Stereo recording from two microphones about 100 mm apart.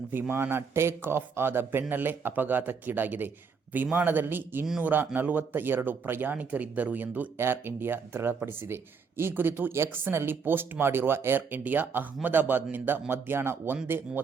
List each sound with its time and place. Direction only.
0.1 s speech: 20° right (ahead or behind)